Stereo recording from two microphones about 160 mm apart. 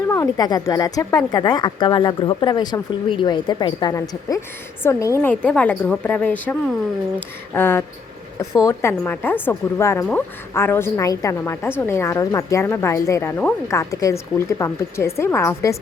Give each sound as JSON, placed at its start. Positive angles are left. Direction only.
{"t": 0.1, "sound": "a woman's voice", "side_deg": 20}